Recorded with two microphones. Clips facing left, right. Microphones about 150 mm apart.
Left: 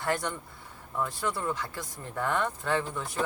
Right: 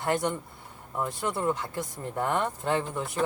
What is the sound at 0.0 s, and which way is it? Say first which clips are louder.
Speech: right 3 dB; 20° right (ahead or behind).